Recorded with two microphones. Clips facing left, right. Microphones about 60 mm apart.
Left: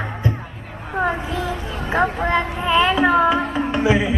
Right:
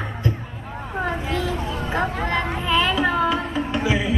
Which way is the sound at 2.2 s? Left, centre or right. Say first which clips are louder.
Left 3 dB; centre.